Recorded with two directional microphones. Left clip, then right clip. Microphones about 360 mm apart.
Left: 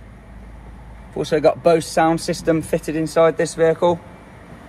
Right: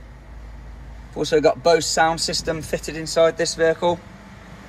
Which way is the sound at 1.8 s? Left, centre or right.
Centre.